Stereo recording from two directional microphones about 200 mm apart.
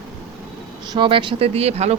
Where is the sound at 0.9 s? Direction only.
25° right (ahead or behind).